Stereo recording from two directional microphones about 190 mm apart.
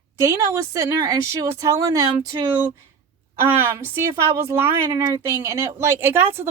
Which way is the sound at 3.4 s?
10° right (ahead or behind).